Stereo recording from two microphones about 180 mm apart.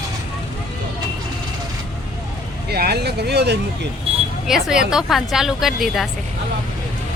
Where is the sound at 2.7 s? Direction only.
60° right (ahead or behind).